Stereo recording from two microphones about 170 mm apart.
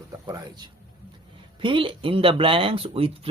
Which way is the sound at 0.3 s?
25° right (ahead or behind).